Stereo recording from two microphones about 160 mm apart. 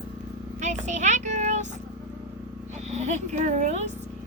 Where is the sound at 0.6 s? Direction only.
50° right (ahead or behind).